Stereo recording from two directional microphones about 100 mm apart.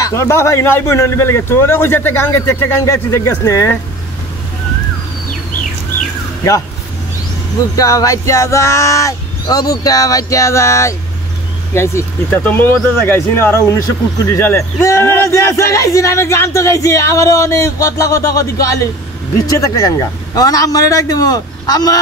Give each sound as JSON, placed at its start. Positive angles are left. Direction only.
{"t": 0.0, "sound": "a man's voice", "side_deg": 30}
{"t": 7.7, "sound": "a man's voice", "side_deg": 35}